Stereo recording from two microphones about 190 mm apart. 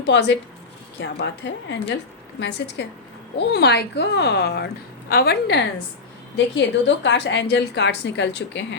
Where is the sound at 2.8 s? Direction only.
65° left (ahead or behind).